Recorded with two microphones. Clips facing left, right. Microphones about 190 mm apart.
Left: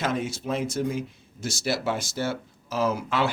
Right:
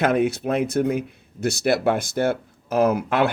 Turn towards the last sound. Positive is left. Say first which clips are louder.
# right 6 dB
turn(degrees=-60)  # may be behind; listen again after turning